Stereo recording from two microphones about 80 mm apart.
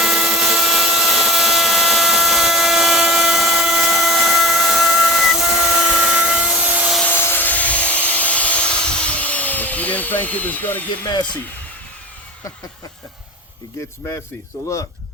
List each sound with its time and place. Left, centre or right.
0.0 s a sound: centre
6.7 s rub: centre
7.1 s helicopter: left
11.0 s speech: left